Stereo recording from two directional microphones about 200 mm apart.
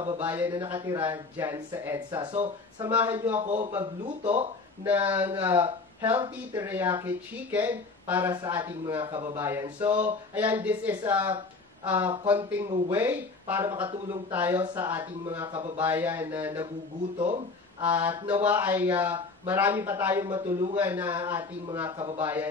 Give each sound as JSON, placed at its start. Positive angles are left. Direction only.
{"t": 0.2, "sound": "speech", "side_deg": -10}
{"t": 2.9, "sound": "speech", "side_deg": -10}
{"t": 3.3, "sound": "speech", "side_deg": -30}
{"t": 4.8, "sound": "speech", "side_deg": -10}
{"t": 5.3, "sound": "speech", "side_deg": -20}
{"t": 6.5, "sound": "speech", "side_deg": -10}
{"t": 15.4, "sound": "speech", "side_deg": -30}
{"t": 15.8, "sound": "speech", "side_deg": -10}
{"t": 17.2, "sound": "speech", "side_deg": -25}
{"t": 17.8, "sound": "speech", "side_deg": -10}
{"t": 21.9, "sound": "speech", "side_deg": -25}
{"t": 22.2, "sound": "speech", "side_deg": -10}